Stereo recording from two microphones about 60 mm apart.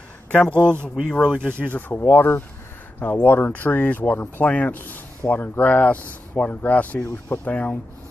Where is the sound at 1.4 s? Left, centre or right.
Right.